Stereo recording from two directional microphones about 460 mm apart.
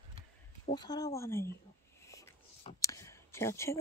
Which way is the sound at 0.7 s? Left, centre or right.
Centre.